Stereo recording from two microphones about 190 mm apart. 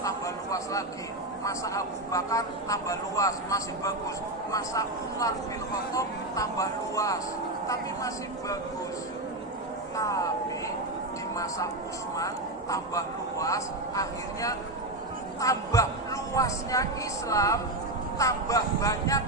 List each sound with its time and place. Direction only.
0.0 s a sound: 15° left (ahead or behind)
1.5 s a man's voice: 15° left (ahead or behind)
10.0 s a man's voice: 15° left (ahead or behind)
12.7 s a man's voice: 15° left (ahead or behind)